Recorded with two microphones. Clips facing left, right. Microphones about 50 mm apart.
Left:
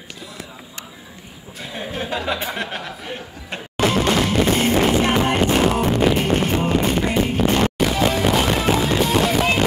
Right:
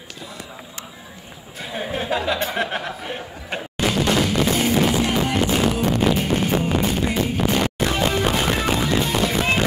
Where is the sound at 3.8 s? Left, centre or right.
Left.